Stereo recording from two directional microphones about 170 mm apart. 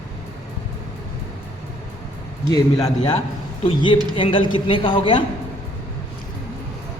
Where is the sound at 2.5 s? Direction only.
20° left (ahead or behind).